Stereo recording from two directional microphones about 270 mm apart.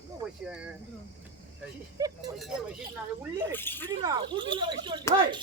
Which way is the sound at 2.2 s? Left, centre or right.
Centre.